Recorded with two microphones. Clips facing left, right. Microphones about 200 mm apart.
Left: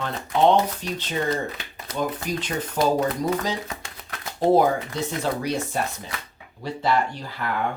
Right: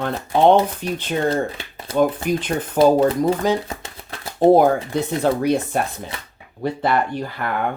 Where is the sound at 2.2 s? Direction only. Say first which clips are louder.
Right 6 dB; 55° right (ahead or behind).